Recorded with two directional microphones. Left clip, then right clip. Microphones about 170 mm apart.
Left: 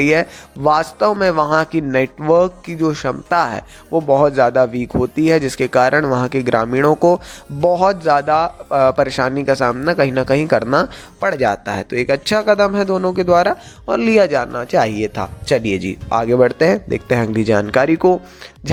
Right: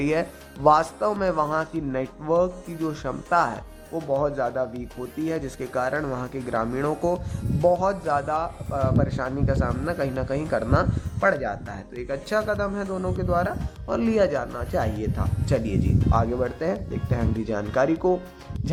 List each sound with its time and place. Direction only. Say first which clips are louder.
0.0 s a man's voice: left 10 dB; 20° left (ahead or behind)
8.7 s speech: left 13 dB; 40° left (ahead or behind)
13.8 s speech: left 9 dB; 25° left (ahead or behind)